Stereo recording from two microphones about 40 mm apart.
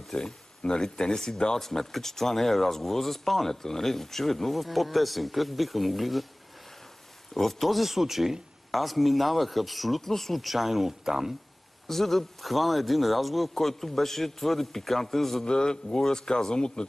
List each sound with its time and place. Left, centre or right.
0.1 s speech: centre
7.3 s speech: centre
11.9 s speech: centre
15.4 s speech: left